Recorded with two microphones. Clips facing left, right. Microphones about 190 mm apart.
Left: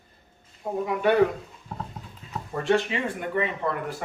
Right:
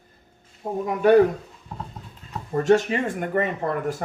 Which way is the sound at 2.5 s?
40° right (ahead or behind).